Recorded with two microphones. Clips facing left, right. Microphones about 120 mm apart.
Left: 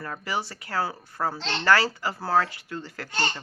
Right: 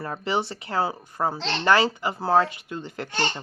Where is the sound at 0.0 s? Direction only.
25° right (ahead or behind).